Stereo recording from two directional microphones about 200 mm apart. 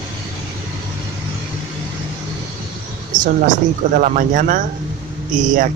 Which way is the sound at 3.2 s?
40° right (ahead or behind).